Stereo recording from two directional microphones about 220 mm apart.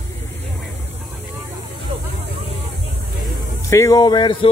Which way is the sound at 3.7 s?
15° left (ahead or behind).